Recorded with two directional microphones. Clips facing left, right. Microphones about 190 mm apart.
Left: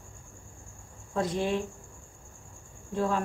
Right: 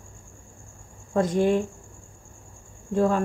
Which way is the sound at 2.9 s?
45° right (ahead or behind).